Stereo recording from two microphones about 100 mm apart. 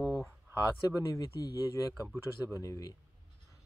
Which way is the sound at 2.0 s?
25° left (ahead or behind).